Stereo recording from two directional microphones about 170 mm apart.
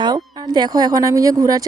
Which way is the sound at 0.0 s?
25° right (ahead or behind).